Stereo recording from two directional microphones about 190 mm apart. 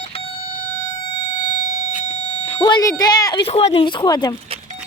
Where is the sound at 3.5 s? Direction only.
30° left (ahead or behind).